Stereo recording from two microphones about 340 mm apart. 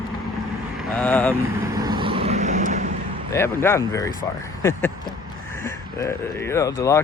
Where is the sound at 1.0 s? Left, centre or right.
Centre.